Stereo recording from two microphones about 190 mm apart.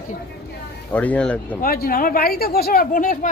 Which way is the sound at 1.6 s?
50° left (ahead or behind).